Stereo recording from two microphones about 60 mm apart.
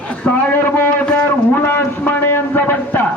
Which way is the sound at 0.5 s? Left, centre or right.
Left.